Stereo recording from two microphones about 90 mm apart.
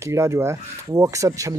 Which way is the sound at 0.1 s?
30° right (ahead or behind).